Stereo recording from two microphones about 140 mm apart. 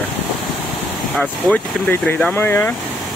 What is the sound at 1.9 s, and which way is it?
Speech, 15° left (ahead or behind).